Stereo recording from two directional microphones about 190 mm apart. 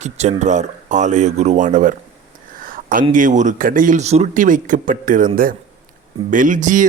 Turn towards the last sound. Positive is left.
turn(degrees=-40)  # may be behind; listen again after turning